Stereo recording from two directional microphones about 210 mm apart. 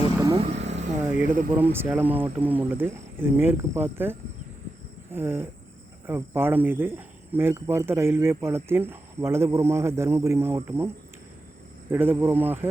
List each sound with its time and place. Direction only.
0.3 s vehicle: 30° right (ahead or behind)
1.5 s speech: 10° right (ahead or behind)
11.9 s speech: 10° right (ahead or behind)